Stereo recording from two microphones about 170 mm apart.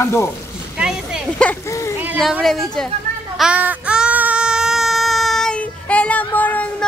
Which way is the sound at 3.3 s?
5° right (ahead or behind).